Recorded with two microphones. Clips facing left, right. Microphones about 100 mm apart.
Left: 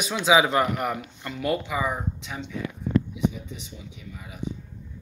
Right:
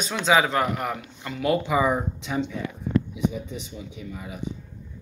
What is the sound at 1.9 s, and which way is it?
Speech, 45° right (ahead or behind).